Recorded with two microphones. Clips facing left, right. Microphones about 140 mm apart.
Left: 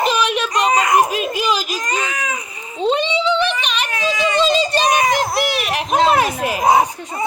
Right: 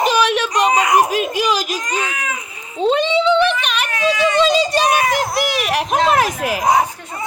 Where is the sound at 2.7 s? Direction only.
5° right (ahead or behind).